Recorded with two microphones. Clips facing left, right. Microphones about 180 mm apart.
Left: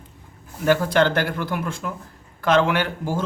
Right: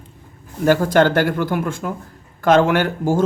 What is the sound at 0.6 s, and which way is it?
A man's voice, 40° right (ahead or behind).